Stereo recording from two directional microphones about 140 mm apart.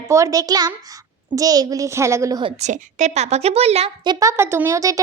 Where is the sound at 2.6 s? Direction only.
60° right (ahead or behind).